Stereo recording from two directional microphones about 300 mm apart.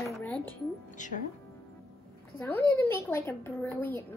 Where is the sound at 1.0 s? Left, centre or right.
Left.